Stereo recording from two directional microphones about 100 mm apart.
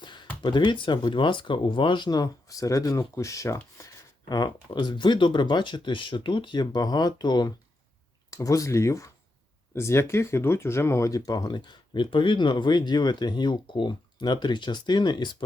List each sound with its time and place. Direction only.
0.0 s a sound: 50° left (ahead or behind)
0.4 s speech: 50° left (ahead or behind); by 3.6 s 30° left (ahead or behind)
4.3 s speech: 45° left (ahead or behind)
8.3 s speech: 35° left (ahead or behind)